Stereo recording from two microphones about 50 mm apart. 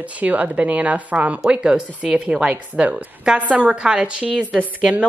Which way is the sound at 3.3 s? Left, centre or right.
Right.